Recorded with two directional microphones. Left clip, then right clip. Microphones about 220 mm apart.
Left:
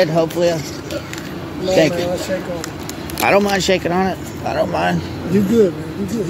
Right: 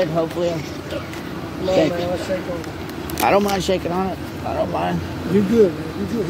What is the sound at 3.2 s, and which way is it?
Speech, 10° left (ahead or behind).